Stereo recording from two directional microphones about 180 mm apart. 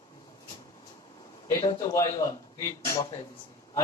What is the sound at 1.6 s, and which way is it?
Speech, 15° left (ahead or behind).